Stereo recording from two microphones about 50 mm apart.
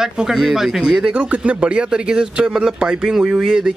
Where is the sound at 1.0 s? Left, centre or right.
Right.